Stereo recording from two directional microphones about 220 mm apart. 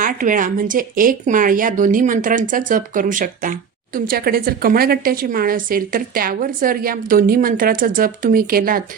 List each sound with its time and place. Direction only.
0.0 s speech: 35° right (ahead or behind)